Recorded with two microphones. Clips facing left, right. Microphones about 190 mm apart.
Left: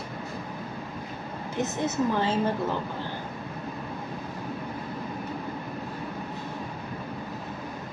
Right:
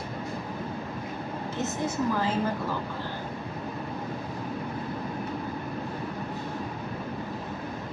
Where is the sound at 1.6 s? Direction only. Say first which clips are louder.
Left 3 dB; 25° left (ahead or behind).